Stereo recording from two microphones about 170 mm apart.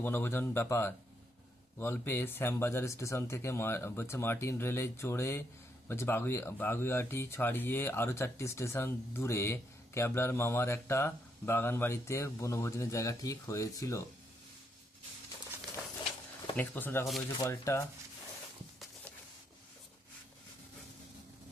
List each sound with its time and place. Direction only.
0.0 s speech: 15° left (ahead or behind)
16.6 s speech: 10° left (ahead or behind)